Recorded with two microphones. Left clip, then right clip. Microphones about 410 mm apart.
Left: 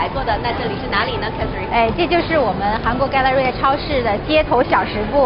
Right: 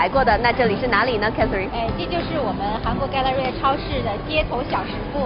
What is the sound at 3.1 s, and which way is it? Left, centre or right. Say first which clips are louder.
Speech: left 5 dB; left.